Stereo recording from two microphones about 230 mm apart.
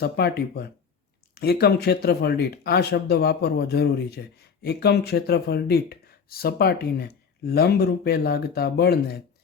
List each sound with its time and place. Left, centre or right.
0.0 s speech: left